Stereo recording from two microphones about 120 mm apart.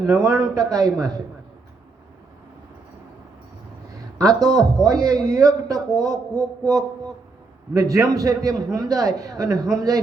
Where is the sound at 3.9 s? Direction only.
30° right (ahead or behind).